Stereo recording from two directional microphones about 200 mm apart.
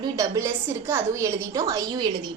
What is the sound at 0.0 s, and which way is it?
A woman's voice, 15° right (ahead or behind).